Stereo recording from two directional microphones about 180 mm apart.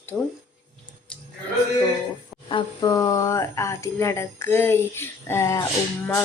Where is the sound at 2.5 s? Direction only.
25° left (ahead or behind).